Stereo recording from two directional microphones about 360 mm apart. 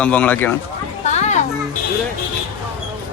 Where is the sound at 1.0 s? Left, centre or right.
Centre.